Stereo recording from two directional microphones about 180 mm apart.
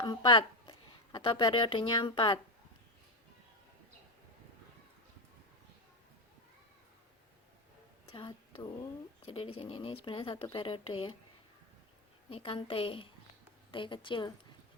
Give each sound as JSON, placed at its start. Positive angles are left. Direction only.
{"t": 0.0, "sound": "speech", "side_deg": 25}
{"t": 8.1, "sound": "speech", "side_deg": 25}
{"t": 12.3, "sound": "speech", "side_deg": 30}